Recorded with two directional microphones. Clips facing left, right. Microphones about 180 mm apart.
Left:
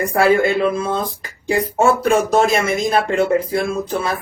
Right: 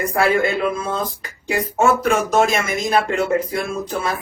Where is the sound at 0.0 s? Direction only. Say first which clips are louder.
Left 3 dB; 30° left (ahead or behind).